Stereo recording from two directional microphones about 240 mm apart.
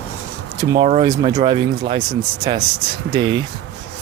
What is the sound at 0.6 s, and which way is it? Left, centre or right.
Speech, centre.